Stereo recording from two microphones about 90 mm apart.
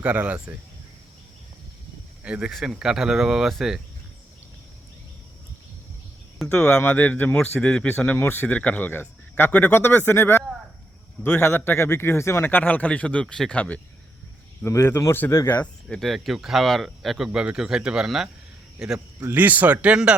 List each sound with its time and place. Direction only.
0.0 s speech: 15° right (ahead or behind)
2.2 s speech: 10° right (ahead or behind)
6.7 s speech: 25° left (ahead or behind)
14.6 s speech: 30° left (ahead or behind)
15.5 s speech: 15° left (ahead or behind)
16.0 s speech: centre (ahead or behind)
18.9 s speech: 25° right (ahead or behind)